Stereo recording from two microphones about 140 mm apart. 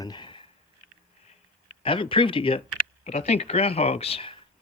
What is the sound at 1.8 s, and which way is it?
Speech, 40° left (ahead or behind).